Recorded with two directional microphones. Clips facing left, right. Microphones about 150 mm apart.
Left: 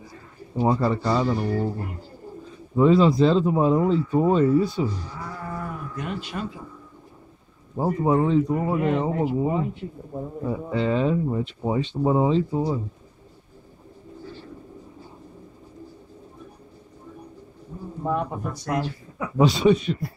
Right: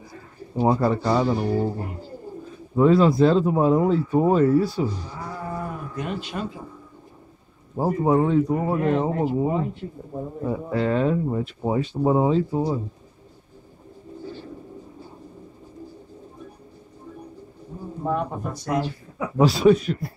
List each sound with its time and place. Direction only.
0.6 s speech: 15° right (ahead or behind)
2.7 s speech: 5° right (ahead or behind)
5.2 s livestock: 20° right (ahead or behind)
7.7 s speech: 10° right (ahead or behind)
10.4 s speech: 5° right (ahead or behind)
18.0 s speech: centre (ahead or behind)